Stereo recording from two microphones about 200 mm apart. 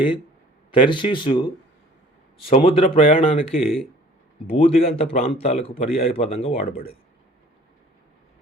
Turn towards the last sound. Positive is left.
turn(degrees=30)  # may be behind; listen again after turning